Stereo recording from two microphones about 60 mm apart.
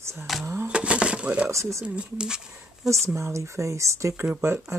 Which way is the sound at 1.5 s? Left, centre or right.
Right.